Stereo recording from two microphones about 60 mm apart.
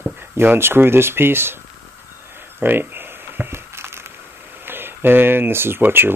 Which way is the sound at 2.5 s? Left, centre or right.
Right.